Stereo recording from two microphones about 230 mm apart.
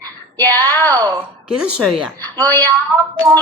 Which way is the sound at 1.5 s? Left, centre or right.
Centre.